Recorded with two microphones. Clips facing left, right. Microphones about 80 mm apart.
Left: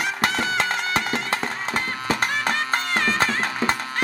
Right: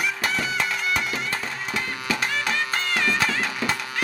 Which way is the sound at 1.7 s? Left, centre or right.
Left.